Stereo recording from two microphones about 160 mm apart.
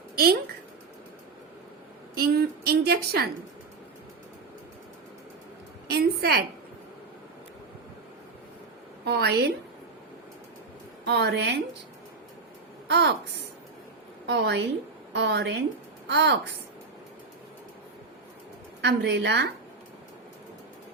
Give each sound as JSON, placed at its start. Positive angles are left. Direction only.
{"t": 2.1, "sound": "a woman's voice", "side_deg": -75}
{"t": 5.9, "sound": "a sound", "side_deg": -80}
{"t": 9.0, "sound": "a woman's voice", "side_deg": -90}
{"t": 11.1, "sound": "a woman's voice", "side_deg": -90}
{"t": 12.9, "sound": "a woman's voice", "side_deg": -90}
{"t": 14.3, "sound": "a woman's voice", "side_deg": -90}
{"t": 18.8, "sound": "a woman's voice", "side_deg": -90}